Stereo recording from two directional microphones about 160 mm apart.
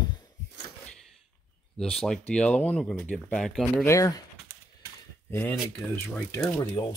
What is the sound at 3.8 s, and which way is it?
Speech, 20° left (ahead or behind).